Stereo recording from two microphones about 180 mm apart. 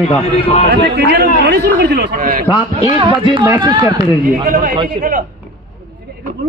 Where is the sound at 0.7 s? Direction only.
65° right (ahead or behind).